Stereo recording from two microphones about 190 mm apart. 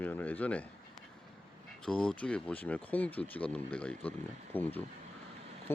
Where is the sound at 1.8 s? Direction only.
5° left (ahead or behind).